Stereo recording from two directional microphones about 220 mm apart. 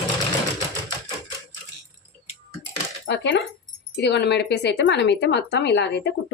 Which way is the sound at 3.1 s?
50° left (ahead or behind).